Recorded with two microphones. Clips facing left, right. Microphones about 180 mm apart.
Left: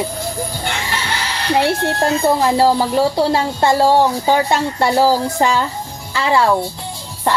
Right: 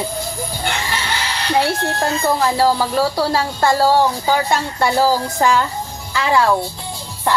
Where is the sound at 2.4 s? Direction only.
25° left (ahead or behind).